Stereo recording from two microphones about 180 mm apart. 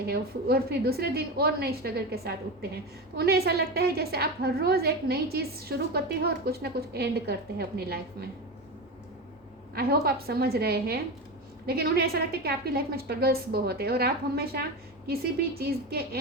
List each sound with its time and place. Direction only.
0.0 s a woman's voice: 60° right (ahead or behind)
9.7 s a woman's voice: 60° right (ahead or behind)